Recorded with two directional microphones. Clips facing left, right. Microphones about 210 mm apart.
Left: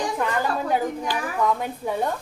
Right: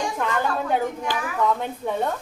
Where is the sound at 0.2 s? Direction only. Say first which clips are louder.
Right 1 dB; 5° left (ahead or behind).